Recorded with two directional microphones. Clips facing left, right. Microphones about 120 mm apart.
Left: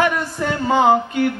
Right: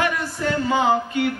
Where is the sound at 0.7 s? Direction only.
50° left (ahead or behind).